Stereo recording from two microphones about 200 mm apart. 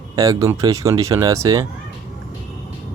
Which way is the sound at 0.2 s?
15° right (ahead or behind).